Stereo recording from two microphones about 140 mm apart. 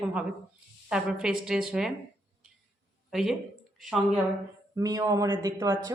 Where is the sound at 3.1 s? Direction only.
Centre (ahead or behind).